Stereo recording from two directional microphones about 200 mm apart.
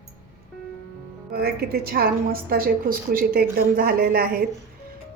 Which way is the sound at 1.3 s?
50° right (ahead or behind).